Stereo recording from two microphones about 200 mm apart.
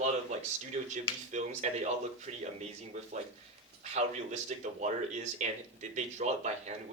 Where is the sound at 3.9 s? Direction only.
35° right (ahead or behind).